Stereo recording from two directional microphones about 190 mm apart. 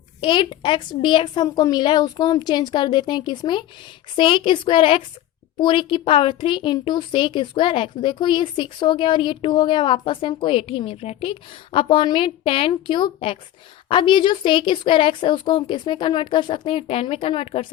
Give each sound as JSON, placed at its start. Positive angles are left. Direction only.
{"t": 0.2, "sound": "speech", "side_deg": 25}